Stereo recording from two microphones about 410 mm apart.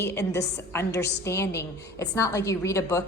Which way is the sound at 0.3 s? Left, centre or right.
Left.